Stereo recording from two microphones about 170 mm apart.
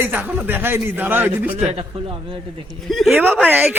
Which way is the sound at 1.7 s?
30° right (ahead or behind).